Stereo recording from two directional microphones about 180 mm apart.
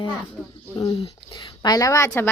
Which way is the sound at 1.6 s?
20° left (ahead or behind).